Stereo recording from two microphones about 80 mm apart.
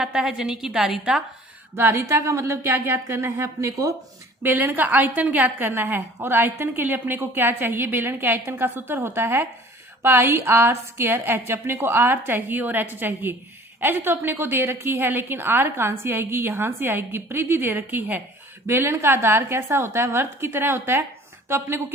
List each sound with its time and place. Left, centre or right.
0.0 s a woman's voice: centre
1.7 s a woman's voice: right
4.4 s a woman's voice: right